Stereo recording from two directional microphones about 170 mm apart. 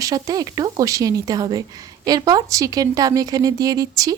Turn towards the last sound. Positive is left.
turn(degrees=-20)  # may be behind; listen again after turning